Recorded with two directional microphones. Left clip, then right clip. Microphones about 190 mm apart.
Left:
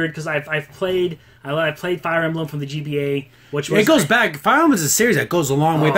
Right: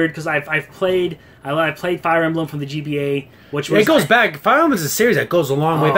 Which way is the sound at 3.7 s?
35° left (ahead or behind).